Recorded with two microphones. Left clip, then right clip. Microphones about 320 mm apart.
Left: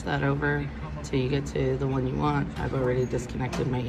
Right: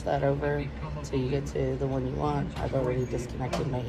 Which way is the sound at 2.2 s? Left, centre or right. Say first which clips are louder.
Left 2 dB; centre.